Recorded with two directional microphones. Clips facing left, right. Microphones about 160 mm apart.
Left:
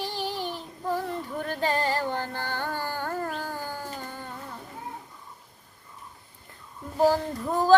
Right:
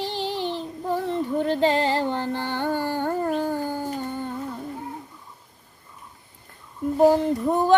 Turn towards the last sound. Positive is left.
turn(degrees=-20)  # may be behind; listen again after turning